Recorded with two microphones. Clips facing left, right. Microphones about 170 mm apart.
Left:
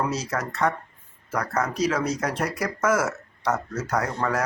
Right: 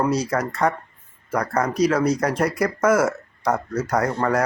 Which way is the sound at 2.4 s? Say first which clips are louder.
Right 6 dB; 60° right (ahead or behind).